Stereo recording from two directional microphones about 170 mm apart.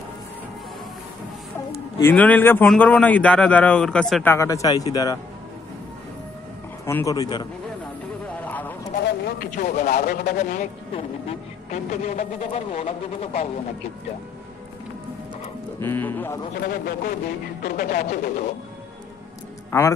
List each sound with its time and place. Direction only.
1.7 s a man's voice: 15° left (ahead or behind)
6.9 s a man's voice: 15° left (ahead or behind)
8.4 s a sound: 10° left (ahead or behind)
9.0 s speech: 75° left (ahead or behind)
9.5 s speech: 50° left (ahead or behind)
11.0 s a man's voice: 40° left (ahead or behind)
15.8 s speech: 15° left (ahead or behind)
16.6 s speech: 65° left (ahead or behind)
19.7 s speech: 15° left (ahead or behind)